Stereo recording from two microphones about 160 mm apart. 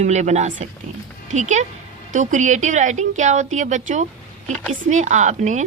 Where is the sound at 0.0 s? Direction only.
45° right (ahead or behind).